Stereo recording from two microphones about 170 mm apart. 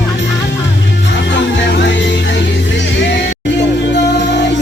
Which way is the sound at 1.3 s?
90° left.